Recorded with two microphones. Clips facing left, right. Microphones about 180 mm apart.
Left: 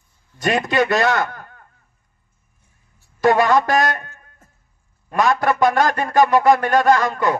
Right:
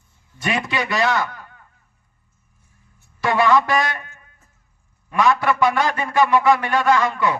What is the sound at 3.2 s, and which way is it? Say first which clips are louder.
A man's voice: left 2 dB; 45° left (ahead or behind).